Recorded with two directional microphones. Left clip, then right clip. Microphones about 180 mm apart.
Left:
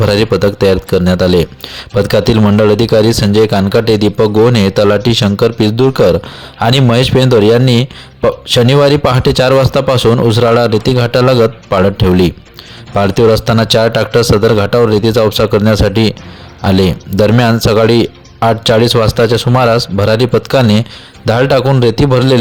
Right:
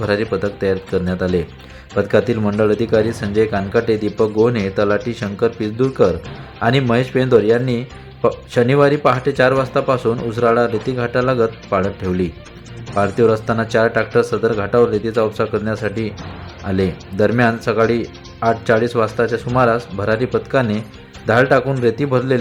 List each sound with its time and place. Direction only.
0.0 s speech: 35° left (ahead or behind)